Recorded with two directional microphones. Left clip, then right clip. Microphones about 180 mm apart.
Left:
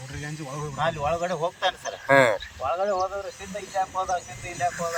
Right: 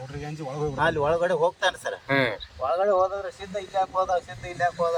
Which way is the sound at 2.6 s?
20° right (ahead or behind).